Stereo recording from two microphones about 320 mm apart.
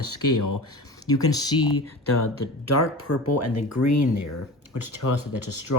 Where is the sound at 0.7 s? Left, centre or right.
Centre.